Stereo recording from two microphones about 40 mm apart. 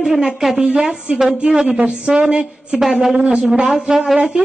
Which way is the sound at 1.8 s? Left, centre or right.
Right.